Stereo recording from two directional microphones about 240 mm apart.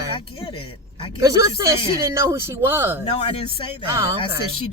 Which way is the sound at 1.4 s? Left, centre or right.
Centre.